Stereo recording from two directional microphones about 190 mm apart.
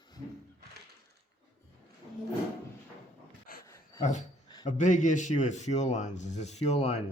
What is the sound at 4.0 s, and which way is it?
Speech, 40° left (ahead or behind).